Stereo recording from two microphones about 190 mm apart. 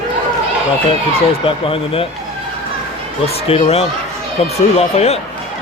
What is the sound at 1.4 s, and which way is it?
Speech, 30° left (ahead or behind).